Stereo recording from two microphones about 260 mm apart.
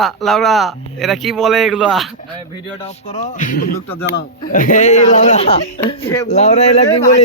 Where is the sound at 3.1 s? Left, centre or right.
Left.